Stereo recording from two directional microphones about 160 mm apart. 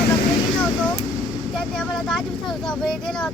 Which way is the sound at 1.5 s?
5° left (ahead or behind).